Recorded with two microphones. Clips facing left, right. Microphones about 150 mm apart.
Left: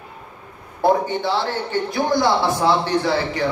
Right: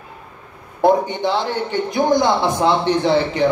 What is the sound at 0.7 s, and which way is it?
A man's voice, 20° right (ahead or behind).